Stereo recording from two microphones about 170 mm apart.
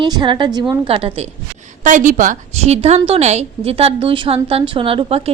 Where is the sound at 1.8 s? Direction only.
50° right (ahead or behind).